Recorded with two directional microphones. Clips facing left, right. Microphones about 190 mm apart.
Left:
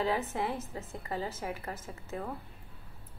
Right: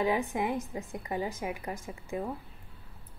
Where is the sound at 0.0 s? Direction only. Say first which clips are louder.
Right 3 dB; 15° right (ahead or behind).